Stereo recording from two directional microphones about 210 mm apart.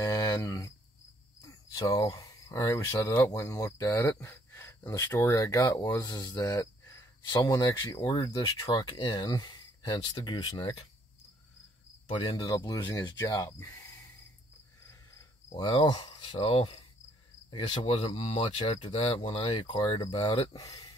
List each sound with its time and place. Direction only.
0.0 s speech: 15° left (ahead or behind)
12.1 s speech: 20° left (ahead or behind)
14.9 s cricket: 15° left (ahead or behind)
17.5 s speech: 25° left (ahead or behind)